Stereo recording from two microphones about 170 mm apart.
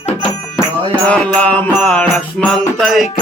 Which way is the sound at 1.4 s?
10° left (ahead or behind).